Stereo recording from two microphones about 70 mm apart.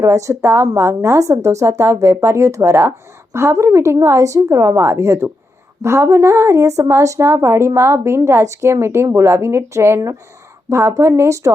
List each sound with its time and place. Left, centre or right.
0.0 s a woman's voice: right